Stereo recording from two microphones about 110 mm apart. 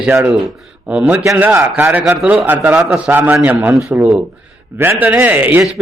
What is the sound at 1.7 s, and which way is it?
A man's voice, 15° right (ahead or behind).